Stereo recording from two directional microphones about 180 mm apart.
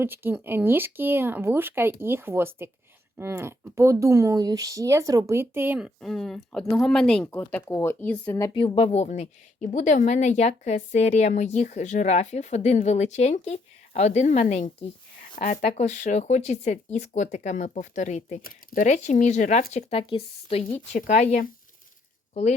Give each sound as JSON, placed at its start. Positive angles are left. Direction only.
{"t": 0.0, "sound": "speech", "side_deg": -10}
{"t": 6.0, "sound": "speech", "side_deg": 0}
{"t": 8.5, "sound": "a woman's voice", "side_deg": 30}